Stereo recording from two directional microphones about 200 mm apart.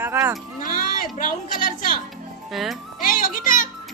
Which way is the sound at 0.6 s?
45° left (ahead or behind).